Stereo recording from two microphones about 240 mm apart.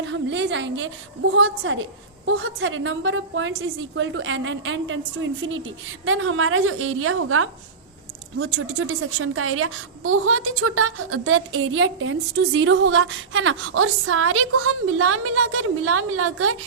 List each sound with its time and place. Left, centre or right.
0.0 s a woman's voice: right